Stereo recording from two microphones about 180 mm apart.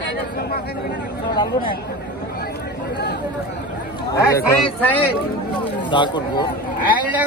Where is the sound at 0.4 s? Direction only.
60° left (ahead or behind).